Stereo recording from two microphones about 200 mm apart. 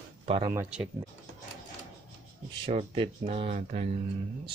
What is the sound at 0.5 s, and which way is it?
Speech, 5° right (ahead or behind).